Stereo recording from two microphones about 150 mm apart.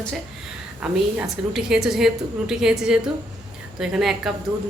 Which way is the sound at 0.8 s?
5° right (ahead or behind).